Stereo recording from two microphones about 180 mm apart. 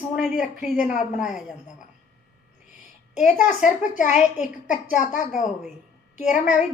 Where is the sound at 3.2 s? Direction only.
45° left (ahead or behind).